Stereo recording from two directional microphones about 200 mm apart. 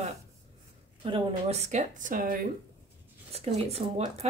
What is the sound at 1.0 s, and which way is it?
Speech, 30° right (ahead or behind).